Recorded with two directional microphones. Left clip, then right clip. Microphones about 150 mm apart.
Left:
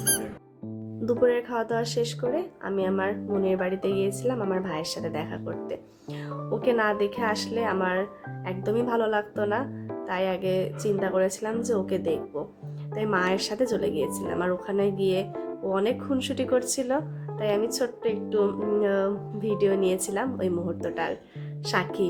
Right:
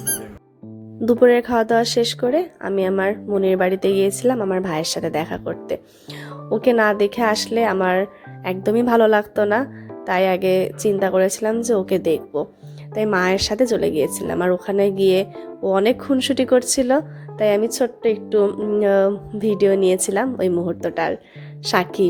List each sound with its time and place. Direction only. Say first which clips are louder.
1.0 s speech: right 9 dB; 50° right (ahead or behind)